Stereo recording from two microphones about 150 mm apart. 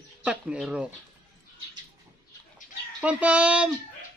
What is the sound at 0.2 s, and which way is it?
Speech, 10° right (ahead or behind).